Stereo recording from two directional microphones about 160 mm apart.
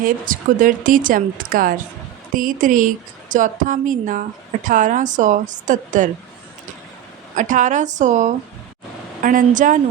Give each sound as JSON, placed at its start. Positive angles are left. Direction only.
{"t": 0.0, "sound": "a woman's voice", "side_deg": -60}
{"t": 7.3, "sound": "a woman's voice", "side_deg": -50}